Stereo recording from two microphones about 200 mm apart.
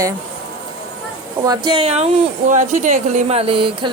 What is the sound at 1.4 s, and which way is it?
Speech, 20° right (ahead or behind).